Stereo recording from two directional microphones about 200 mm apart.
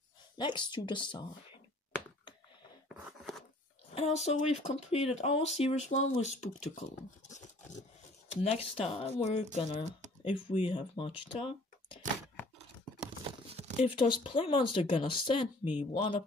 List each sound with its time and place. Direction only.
0.4 s speech: 25° left (ahead or behind)
3.0 s a sound: centre (ahead or behind)
3.9 s speech: 30° left (ahead or behind)
8.5 s speech: 30° left (ahead or behind)
13.5 s crumpling: 35° right (ahead or behind)
13.8 s speech: 25° left (ahead or behind)
15.6 s speech: 10° right (ahead or behind)
15.9 s speech: 25° left (ahead or behind)